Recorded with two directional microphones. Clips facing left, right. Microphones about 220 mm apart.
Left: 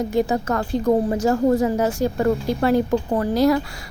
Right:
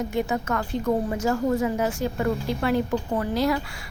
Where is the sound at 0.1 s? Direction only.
35° left (ahead or behind).